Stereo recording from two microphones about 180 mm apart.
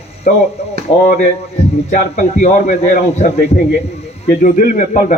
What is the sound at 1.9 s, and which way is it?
Speech, 45° left (ahead or behind).